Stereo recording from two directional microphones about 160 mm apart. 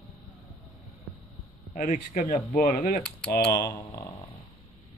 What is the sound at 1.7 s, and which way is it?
Speech, 60° left (ahead or behind).